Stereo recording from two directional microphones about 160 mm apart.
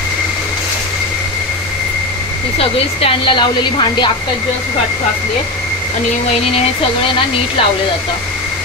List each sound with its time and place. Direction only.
2.6 s a woman's voice: 35° left (ahead or behind)